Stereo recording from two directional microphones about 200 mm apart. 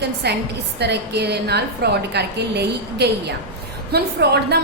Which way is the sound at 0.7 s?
55° right (ahead or behind).